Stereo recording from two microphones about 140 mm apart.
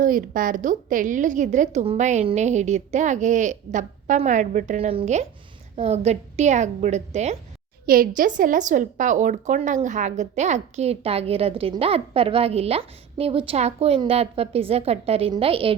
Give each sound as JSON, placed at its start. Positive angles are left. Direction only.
{"t": 0.0, "sound": "a woman's voice", "side_deg": -75}
{"t": 7.9, "sound": "a woman's voice", "side_deg": -90}
{"t": 8.4, "sound": "a woman's voice", "side_deg": -70}